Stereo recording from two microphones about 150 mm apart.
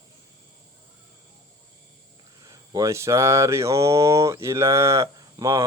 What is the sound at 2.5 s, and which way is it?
Speech, 20° right (ahead or behind).